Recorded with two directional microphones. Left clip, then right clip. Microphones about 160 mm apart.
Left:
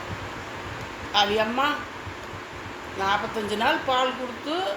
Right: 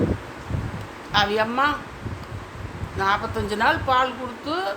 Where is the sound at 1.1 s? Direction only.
15° right (ahead or behind).